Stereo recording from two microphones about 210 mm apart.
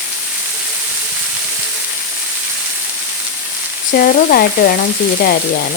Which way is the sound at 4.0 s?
45° left (ahead or behind).